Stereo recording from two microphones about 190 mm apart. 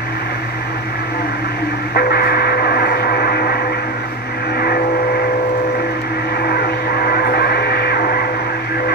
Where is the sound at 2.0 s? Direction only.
55° left (ahead or behind).